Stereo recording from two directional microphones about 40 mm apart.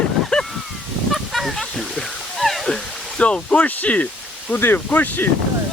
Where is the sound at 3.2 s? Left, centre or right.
Left.